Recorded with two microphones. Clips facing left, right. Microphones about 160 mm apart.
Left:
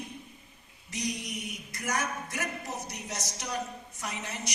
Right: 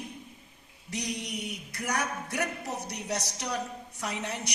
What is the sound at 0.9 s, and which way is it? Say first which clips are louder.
A woman's voice: even; 65° right (ahead or behind).